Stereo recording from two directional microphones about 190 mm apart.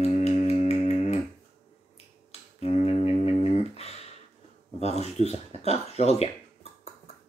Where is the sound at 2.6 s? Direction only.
35° left (ahead or behind).